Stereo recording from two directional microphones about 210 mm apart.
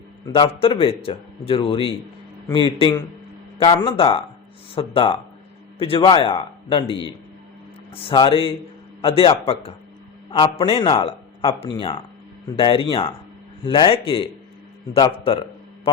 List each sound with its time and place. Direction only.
0.3 s a man's voice: 25° left (ahead or behind)